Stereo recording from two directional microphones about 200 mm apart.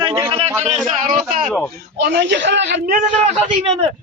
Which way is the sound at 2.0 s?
55° right (ahead or behind).